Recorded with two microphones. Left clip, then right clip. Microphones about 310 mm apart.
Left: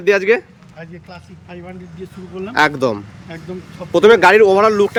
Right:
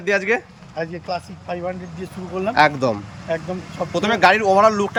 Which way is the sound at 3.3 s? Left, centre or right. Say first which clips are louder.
Right 11 dB; centre.